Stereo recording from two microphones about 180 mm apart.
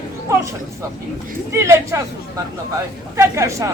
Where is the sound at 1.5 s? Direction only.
15° right (ahead or behind).